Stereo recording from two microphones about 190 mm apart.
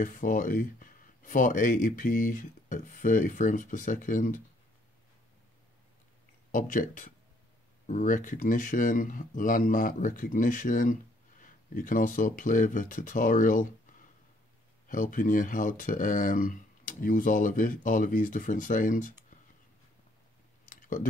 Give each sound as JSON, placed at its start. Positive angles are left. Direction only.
{"t": 0.0, "sound": "speech", "side_deg": 45}
{"t": 6.5, "sound": "speech", "side_deg": 45}
{"t": 14.9, "sound": "speech", "side_deg": 45}
{"t": 20.6, "sound": "clicking", "side_deg": 45}